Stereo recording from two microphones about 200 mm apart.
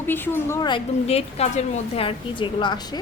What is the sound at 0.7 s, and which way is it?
A woman's voice, 30° left (ahead or behind).